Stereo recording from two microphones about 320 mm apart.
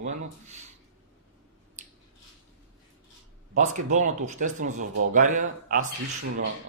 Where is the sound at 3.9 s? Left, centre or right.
Right.